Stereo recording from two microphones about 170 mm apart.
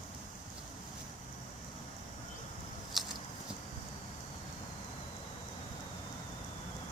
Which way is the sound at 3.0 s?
Centre (ahead or behind).